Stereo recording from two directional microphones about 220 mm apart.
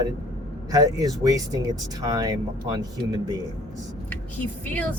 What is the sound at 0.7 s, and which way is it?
Speech, 15° right (ahead or behind).